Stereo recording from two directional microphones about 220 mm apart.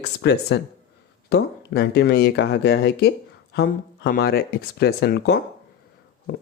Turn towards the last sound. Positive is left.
turn(degrees=50)  # may be behind; listen again after turning